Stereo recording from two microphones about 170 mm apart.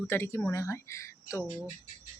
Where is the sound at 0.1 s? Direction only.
15° left (ahead or behind).